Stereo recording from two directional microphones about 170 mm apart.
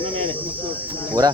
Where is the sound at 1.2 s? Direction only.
20° right (ahead or behind).